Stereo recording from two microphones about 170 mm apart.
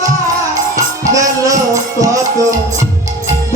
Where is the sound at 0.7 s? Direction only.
20° right (ahead or behind).